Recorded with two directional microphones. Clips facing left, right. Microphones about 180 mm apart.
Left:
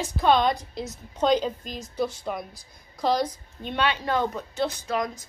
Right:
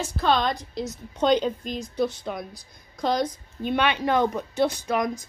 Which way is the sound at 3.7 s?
15° right (ahead or behind).